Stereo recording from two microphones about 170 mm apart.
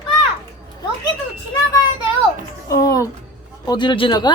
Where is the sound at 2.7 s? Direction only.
20° left (ahead or behind).